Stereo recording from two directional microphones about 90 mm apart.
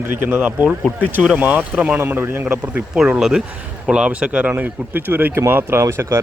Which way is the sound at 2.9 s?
5° right (ahead or behind).